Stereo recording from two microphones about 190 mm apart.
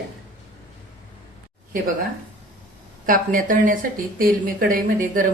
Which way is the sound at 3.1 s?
45° right (ahead or behind).